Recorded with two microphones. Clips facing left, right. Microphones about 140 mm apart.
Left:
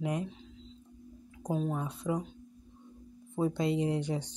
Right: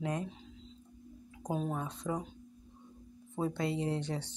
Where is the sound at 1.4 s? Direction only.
5° right (ahead or behind).